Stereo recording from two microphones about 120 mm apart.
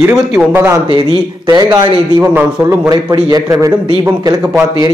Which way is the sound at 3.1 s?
30° right (ahead or behind).